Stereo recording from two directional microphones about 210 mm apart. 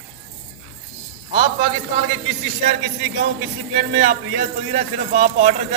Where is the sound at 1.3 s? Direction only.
25° right (ahead or behind).